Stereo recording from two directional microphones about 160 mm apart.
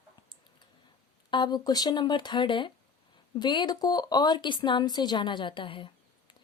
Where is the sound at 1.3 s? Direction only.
25° left (ahead or behind).